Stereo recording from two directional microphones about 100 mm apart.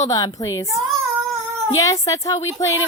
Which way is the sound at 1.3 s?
25° right (ahead or behind).